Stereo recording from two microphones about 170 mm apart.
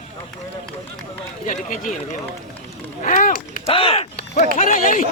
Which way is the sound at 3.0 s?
50° left (ahead or behind).